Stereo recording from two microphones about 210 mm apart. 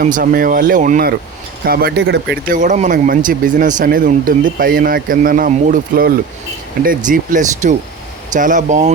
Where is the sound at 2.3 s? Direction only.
40° right (ahead or behind).